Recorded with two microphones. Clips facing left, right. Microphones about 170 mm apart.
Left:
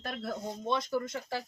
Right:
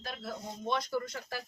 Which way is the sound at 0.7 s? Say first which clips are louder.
Left 1 dB; 25° left (ahead or behind).